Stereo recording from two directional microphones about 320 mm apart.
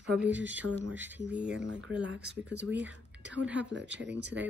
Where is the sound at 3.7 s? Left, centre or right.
Right.